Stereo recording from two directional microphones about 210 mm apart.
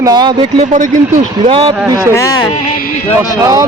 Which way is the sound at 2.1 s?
15° left (ahead or behind).